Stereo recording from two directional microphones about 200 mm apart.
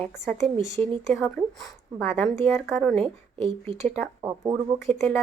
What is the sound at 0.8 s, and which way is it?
Speech, 25° right (ahead or behind).